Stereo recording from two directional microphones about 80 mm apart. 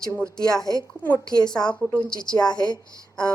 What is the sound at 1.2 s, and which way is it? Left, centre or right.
Speech, left.